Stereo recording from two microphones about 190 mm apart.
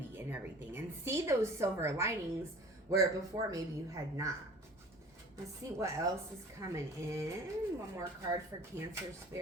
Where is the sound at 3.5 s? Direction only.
15° right (ahead or behind).